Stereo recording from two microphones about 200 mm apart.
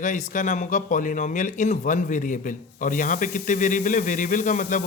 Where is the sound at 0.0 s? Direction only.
40° left (ahead or behind).